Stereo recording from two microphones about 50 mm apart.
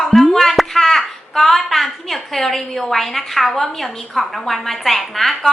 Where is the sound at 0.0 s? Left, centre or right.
Centre.